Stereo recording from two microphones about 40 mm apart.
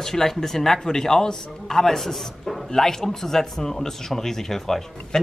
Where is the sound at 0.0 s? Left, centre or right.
Centre.